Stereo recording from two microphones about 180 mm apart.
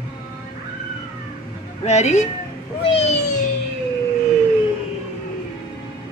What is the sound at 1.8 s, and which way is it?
Speech, 40° left (ahead or behind).